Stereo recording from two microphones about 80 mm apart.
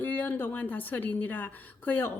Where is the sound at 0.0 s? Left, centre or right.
Left.